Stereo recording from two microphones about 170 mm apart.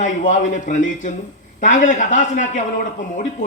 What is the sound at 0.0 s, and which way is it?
A man's voice, 45° left (ahead or behind).